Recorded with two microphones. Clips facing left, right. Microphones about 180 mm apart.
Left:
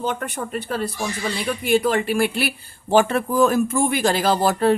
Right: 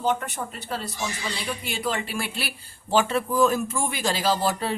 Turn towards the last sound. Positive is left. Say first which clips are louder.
# left 6 dB
turn(degrees=55)  # may be behind; listen again after turning